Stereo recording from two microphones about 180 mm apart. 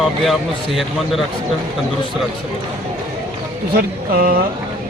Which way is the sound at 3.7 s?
55° right (ahead or behind).